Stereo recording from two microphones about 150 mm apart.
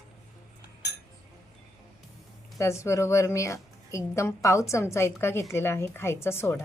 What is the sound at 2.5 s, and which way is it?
A woman's voice, 20° left (ahead or behind).